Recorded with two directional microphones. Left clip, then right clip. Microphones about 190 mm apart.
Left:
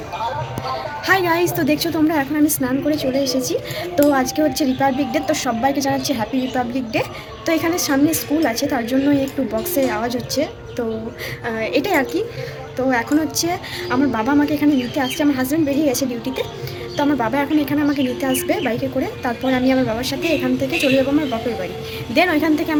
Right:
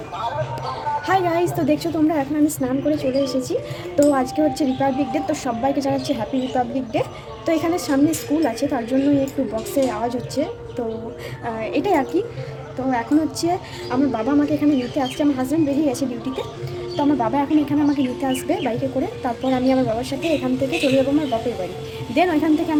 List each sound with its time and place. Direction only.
1.0 s a woman's voice: 10° right (ahead or behind)
22.1 s a woman's voice: 10° right (ahead or behind)